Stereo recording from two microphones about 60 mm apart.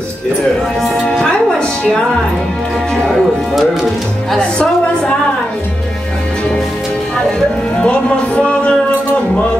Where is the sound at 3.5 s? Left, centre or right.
Centre.